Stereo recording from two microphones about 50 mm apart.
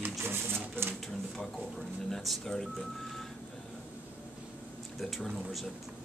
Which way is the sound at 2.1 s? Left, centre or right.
Centre.